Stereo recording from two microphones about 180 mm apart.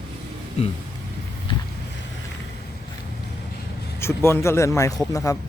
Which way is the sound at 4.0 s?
15° left (ahead or behind).